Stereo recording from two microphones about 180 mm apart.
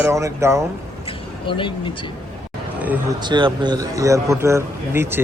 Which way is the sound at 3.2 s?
25° right (ahead or behind).